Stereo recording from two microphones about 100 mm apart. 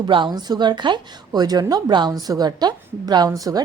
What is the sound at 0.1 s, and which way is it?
A woman's voice, 50° right (ahead or behind).